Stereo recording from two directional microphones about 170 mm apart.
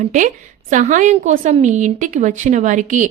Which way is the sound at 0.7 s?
45° right (ahead or behind).